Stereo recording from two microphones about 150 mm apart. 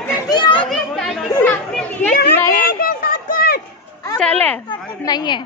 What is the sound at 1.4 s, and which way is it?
Chatter, 15° left (ahead or behind).